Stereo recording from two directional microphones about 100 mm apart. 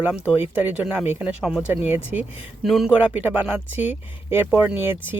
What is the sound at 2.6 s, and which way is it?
Speech, centre (ahead or behind).